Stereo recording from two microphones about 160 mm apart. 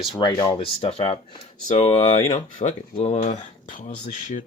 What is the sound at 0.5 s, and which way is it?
Speech, 35° left (ahead or behind).